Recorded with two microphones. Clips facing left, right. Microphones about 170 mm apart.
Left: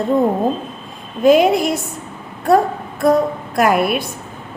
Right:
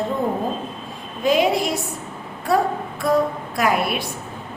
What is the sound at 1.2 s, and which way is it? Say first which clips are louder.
Speech: left 7 dB; 55° left (ahead or behind).